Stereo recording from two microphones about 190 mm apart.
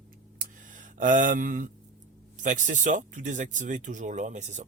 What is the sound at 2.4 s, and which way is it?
Speech, 40° right (ahead or behind).